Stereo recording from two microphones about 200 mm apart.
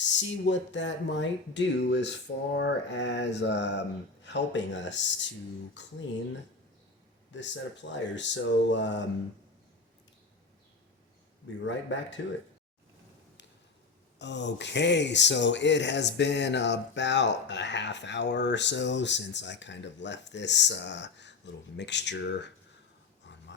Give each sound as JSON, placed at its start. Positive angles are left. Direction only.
{"t": 0.0, "sound": "speech", "side_deg": 65}
{"t": 7.3, "sound": "speech", "side_deg": 65}
{"t": 11.6, "sound": "speech", "side_deg": 65}
{"t": 14.2, "sound": "speech", "side_deg": 60}